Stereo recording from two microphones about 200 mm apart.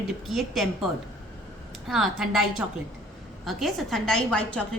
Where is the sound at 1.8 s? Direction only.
Centre (ahead or behind).